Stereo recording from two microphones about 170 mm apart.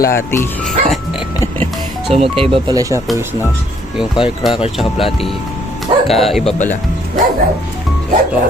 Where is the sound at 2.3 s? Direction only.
30° right (ahead or behind).